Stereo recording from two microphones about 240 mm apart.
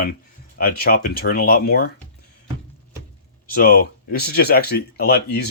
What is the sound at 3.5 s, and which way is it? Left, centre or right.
Speech, left.